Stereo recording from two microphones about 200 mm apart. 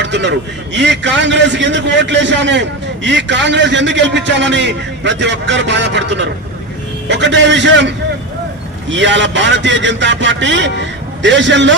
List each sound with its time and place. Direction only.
0.0 s a man's voice: 60° right (ahead or behind)